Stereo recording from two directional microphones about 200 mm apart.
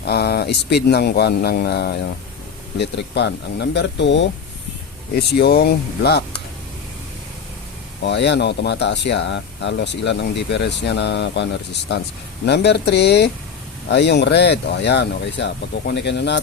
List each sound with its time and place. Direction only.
0.0 s speech: 55° left (ahead or behind)
8.0 s speech: 60° left (ahead or behind)